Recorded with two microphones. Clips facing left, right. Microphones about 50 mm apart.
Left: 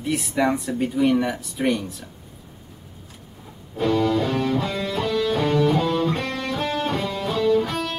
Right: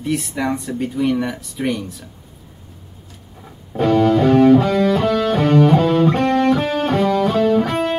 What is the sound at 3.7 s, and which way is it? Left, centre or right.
Music, right.